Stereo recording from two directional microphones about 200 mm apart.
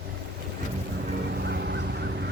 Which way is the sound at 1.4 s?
55° right (ahead or behind).